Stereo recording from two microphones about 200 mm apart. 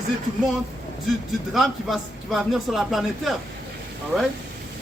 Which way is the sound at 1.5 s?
Centre (ahead or behind).